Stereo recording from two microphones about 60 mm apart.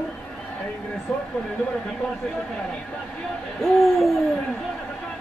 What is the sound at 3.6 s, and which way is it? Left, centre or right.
Hoot, centre.